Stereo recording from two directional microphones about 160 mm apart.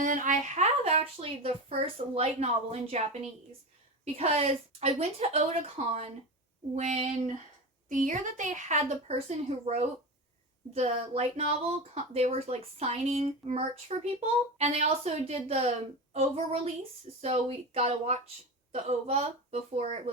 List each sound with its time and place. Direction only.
0.0 s speech: 55° right (ahead or behind)
7.9 s speech: 55° right (ahead or behind)